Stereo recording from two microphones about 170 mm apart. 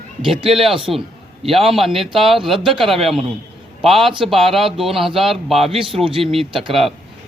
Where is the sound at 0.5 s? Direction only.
Centre (ahead or behind).